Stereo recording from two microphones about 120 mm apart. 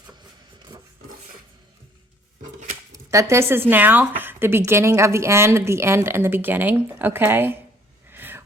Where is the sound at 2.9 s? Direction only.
25° right (ahead or behind).